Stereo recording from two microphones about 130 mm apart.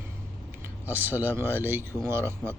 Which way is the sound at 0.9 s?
15° right (ahead or behind).